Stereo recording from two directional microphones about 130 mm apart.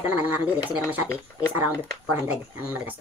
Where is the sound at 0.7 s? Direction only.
10° right (ahead or behind).